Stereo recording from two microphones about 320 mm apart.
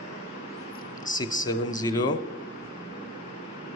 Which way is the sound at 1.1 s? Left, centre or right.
Left.